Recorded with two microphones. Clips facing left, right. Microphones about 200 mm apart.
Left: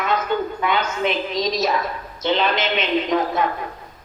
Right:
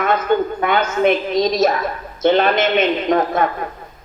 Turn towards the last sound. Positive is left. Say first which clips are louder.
# right 3 dB
turn(degrees=-50)  # may be behind; listen again after turning